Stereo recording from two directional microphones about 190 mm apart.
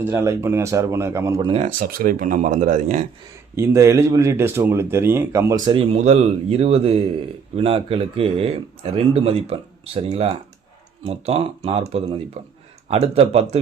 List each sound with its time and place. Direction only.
0.1 s speech: 15° right (ahead or behind)
1.5 s speech: 45° right (ahead or behind)
3.5 s speech: 15° right (ahead or behind); by 13.6 s 30° right (ahead or behind)